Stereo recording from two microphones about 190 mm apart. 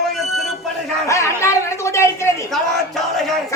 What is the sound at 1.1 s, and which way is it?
A man's voice, 15° left (ahead or behind).